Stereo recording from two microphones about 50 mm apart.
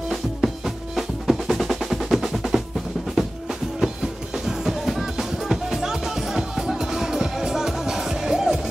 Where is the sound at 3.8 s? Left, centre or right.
Centre.